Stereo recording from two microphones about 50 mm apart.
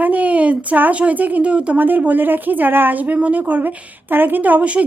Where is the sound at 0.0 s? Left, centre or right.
Right.